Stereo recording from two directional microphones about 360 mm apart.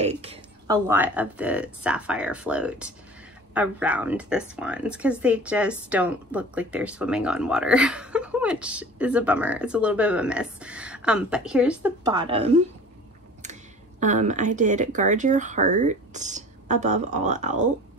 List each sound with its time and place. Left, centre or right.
0.0 s speech: centre